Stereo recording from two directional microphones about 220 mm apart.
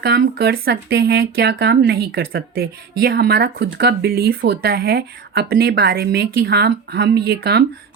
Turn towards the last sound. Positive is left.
turn(degrees=-45)  # may be behind; listen again after turning